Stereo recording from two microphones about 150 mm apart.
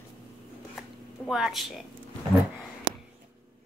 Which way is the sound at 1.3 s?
Centre (ahead or behind).